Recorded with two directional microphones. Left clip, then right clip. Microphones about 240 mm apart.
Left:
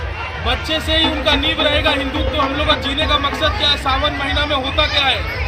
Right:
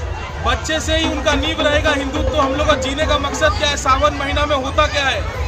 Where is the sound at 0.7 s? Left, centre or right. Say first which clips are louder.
Left 2 dB; centre.